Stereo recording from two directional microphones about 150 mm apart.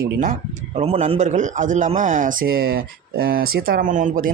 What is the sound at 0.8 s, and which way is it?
A man's voice, 45° right (ahead or behind).